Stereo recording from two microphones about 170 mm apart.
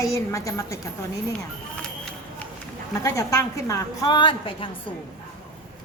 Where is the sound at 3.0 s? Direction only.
20° left (ahead or behind).